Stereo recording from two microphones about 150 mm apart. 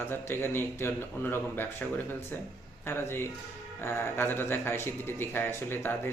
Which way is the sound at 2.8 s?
15° left (ahead or behind).